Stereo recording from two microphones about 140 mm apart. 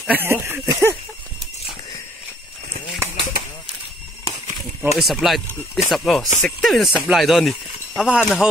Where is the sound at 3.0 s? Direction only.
20° right (ahead or behind).